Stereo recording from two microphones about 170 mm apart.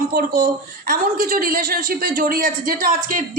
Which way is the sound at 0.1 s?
55° right (ahead or behind).